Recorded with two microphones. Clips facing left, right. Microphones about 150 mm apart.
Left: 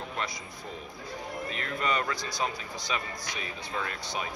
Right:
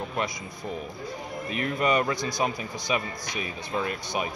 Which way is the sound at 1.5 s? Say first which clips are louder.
Right 7 dB; 15° right (ahead or behind).